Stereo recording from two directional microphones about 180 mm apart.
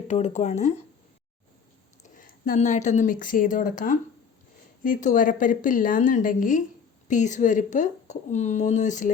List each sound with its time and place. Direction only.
0.1 s speech: 40° left (ahead or behind)
2.1 s speech: 45° left (ahead or behind)